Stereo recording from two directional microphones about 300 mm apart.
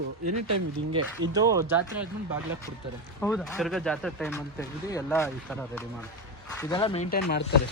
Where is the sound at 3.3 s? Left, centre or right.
Centre.